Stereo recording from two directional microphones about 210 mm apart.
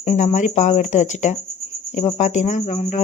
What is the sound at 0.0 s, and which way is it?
Speech, 30° left (ahead or behind).